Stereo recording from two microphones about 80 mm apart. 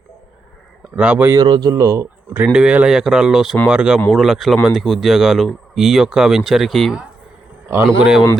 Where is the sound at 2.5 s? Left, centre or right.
Centre.